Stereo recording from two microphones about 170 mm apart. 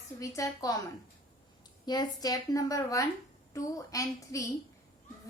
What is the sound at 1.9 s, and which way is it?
A woman's voice, 25° left (ahead or behind).